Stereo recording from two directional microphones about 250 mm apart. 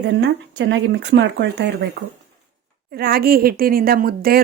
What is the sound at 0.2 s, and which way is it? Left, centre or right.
Speech, right.